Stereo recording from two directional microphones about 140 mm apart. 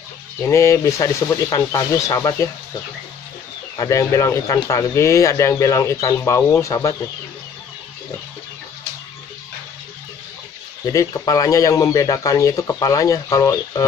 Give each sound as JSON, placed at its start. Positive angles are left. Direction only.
{"t": 0.4, "sound": "speech", "side_deg": 20}
{"t": 3.7, "sound": "speech", "side_deg": 25}
{"t": 10.9, "sound": "speech", "side_deg": 25}